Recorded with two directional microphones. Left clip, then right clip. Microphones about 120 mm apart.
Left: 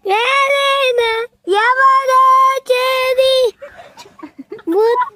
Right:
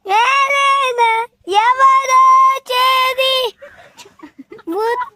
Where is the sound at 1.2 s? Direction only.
20° right (ahead or behind).